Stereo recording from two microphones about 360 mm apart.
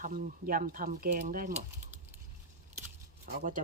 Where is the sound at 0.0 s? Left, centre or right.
Right.